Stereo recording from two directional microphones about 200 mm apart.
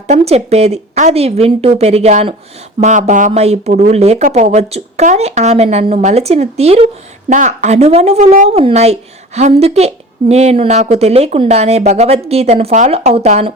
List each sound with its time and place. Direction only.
0.1 s speech: 30° right (ahead or behind)